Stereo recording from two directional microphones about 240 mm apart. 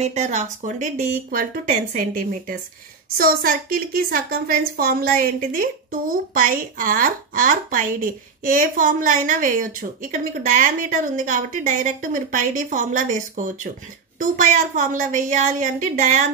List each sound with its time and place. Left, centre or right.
0.0 s a woman's voice: right